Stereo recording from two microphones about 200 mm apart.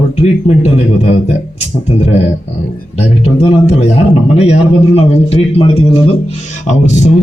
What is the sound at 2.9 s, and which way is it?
A man's voice, 30° left (ahead or behind).